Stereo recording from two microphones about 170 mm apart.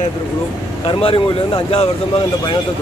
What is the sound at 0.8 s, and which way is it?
Speech, 30° left (ahead or behind).